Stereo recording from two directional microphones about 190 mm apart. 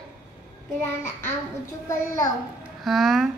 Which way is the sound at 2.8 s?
Centre (ahead or behind).